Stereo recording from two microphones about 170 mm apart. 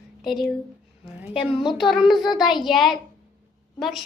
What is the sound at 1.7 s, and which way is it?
Child singing, centre (ahead or behind).